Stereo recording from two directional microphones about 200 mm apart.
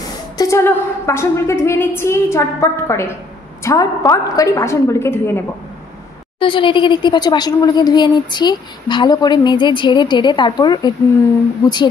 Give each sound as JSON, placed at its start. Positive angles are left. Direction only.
{"t": 0.4, "sound": "a woman's voice", "side_deg": 15}
{"t": 6.4, "sound": "a woman's voice", "side_deg": 25}